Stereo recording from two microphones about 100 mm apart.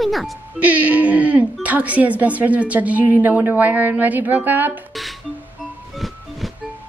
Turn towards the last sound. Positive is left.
turn(degrees=0)  # may be behind; listen again after turning